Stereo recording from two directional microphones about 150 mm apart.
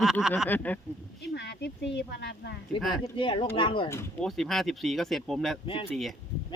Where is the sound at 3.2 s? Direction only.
35° left (ahead or behind).